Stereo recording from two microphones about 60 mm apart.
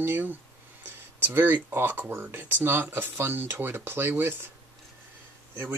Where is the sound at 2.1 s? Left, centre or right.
Right.